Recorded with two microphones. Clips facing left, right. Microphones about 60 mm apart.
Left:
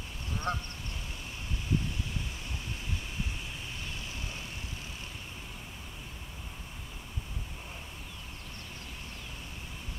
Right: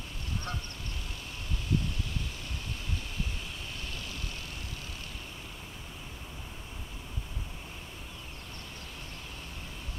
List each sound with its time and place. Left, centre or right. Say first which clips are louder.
0.5 s goose: left 7 dB; left